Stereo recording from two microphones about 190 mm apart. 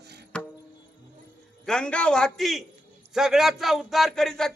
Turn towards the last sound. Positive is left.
turn(degrees=5)  # may be behind; listen again after turning